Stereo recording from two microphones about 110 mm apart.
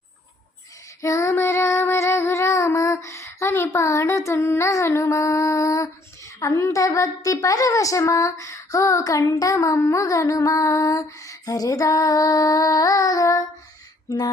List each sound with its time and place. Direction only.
1.0 s child singing: 25° left (ahead or behind)